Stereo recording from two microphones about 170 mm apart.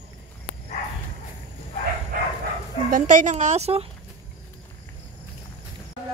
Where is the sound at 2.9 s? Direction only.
45° right (ahead or behind).